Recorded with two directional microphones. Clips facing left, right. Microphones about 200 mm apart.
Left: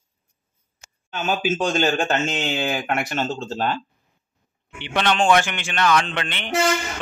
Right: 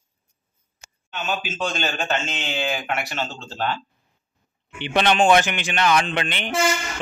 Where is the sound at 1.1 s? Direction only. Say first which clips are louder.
Left 5 dB; 50° left (ahead or behind).